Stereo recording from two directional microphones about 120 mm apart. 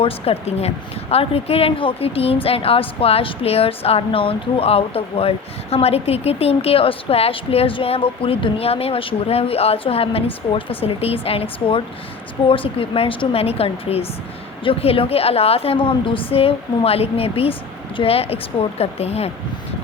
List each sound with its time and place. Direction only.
0.0 s a woman's voice: 60° left (ahead or behind)
12.5 s a woman's voice: 50° left (ahead or behind)